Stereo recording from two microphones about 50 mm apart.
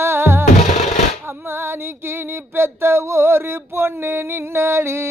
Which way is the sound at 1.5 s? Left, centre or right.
Right.